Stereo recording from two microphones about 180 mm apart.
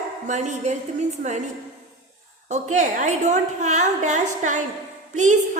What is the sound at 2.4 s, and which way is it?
A woman's voice, 40° right (ahead or behind).